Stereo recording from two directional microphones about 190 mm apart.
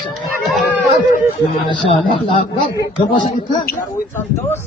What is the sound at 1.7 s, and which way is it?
Child singing, 25° left (ahead or behind).